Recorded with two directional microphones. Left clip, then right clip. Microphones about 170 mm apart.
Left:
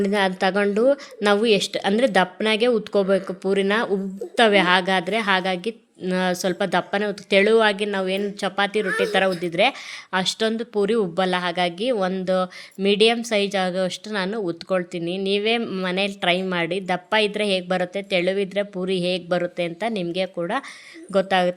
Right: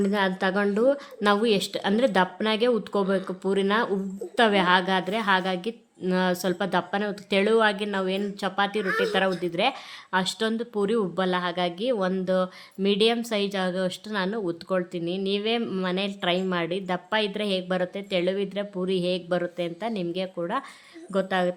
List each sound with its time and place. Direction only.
0.0 s speech: 15° left (ahead or behind)